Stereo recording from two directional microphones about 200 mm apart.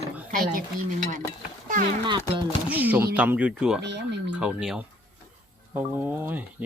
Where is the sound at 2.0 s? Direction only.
25° right (ahead or behind).